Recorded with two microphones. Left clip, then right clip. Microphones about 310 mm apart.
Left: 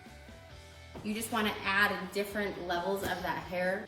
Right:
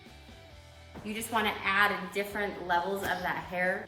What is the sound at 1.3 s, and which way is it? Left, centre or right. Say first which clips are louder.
A woman's voice: right 3 dB; centre.